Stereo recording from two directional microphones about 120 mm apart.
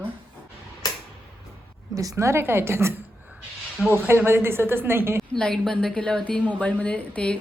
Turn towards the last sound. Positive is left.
turn(degrees=10)  # may be behind; listen again after turning